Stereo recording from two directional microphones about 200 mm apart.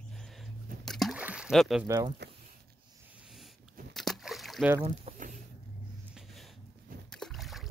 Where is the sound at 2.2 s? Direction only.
55° right (ahead or behind).